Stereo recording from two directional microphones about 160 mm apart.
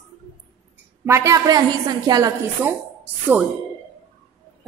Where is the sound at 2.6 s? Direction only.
15° right (ahead or behind).